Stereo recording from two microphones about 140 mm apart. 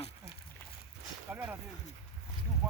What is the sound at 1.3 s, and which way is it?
Speech, 10° right (ahead or behind).